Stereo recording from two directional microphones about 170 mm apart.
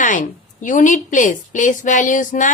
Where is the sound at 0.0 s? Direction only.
50° left (ahead or behind).